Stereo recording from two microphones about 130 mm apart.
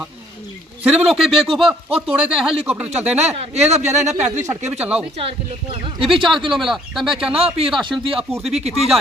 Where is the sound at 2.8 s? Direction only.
55° right (ahead or behind).